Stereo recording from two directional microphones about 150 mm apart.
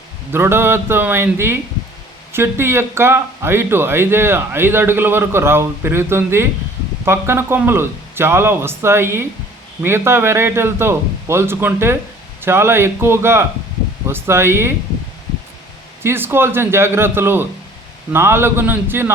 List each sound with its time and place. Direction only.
0.3 s a man's voice: 15° right (ahead or behind)
16.0 s a man's voice: 15° right (ahead or behind)